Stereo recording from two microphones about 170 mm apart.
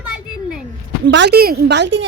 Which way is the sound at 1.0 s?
90° right.